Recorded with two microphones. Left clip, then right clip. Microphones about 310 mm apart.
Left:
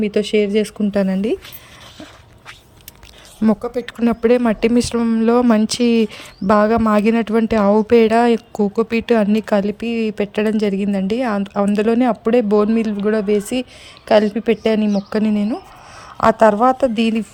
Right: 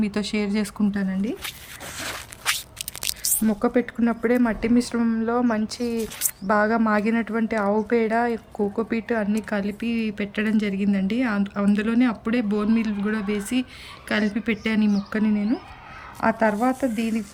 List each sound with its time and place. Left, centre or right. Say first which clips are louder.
0.0 s speech: left 10 dB; centre
3.6 s speech: left 1 dB; left